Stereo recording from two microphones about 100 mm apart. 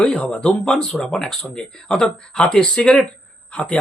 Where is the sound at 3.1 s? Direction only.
10° left (ahead or behind).